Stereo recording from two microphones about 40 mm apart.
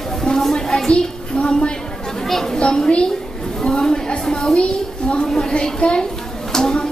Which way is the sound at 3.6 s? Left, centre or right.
Centre.